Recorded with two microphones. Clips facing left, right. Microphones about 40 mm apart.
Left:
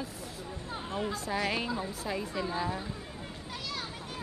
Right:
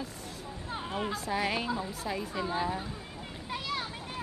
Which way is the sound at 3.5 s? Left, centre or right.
Right.